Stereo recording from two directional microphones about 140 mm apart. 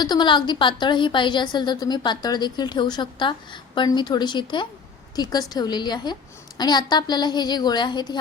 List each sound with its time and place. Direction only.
0.0 s a woman's voice: 30° left (ahead or behind)